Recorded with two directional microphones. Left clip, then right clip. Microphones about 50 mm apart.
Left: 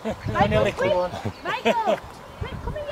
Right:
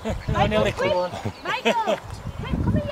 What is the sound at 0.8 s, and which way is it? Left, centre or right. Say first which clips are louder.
Speech: even; right.